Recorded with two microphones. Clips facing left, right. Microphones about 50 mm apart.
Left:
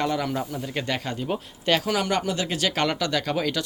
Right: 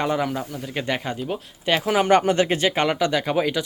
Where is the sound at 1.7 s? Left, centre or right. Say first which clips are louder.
Right 3 dB; centre.